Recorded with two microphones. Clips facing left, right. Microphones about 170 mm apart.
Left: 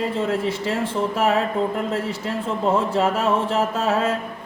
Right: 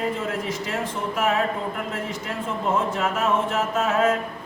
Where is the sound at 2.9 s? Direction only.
30° left (ahead or behind).